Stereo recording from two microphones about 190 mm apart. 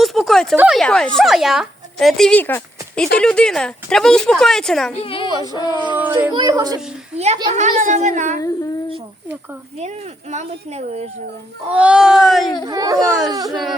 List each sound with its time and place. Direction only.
0.0 s a sound: centre (ahead or behind)
0.5 s a woman's voice: 5° right (ahead or behind)
5.0 s a woman's voice: 30° left (ahead or behind)
6.0 s speech: 10° right (ahead or behind)
6.3 s speech: 20° right (ahead or behind)
7.5 s speech: 40° right (ahead or behind)
9.7 s speech: 35° right (ahead or behind)
11.7 s speech: 5° right (ahead or behind)
12.6 s speech: 20° right (ahead or behind)
13.1 s speech: centre (ahead or behind)
13.3 s speech: 20° right (ahead or behind)